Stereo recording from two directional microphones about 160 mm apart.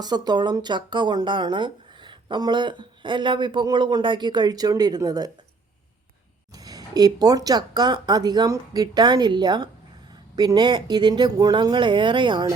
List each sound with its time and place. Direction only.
0.0 s speech: 25° right (ahead or behind)
6.6 s speech: 25° right (ahead or behind)